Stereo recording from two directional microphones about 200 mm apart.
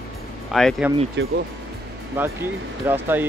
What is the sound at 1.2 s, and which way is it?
Speech, 65° right (ahead or behind).